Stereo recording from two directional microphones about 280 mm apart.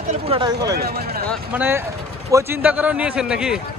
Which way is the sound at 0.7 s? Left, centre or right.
Right.